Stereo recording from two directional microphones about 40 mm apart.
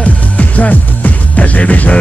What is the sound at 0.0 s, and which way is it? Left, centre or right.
Music, left.